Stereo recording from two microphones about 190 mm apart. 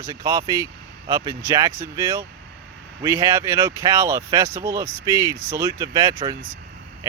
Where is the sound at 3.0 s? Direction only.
15° right (ahead or behind).